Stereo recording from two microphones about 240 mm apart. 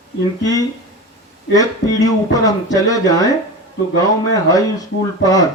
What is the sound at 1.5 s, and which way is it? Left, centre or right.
Speech, centre.